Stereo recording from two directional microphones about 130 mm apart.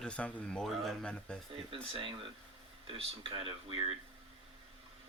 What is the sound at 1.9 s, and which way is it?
Speech, 40° right (ahead or behind).